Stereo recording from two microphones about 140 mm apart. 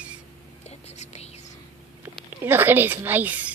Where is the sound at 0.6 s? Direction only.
50° left (ahead or behind).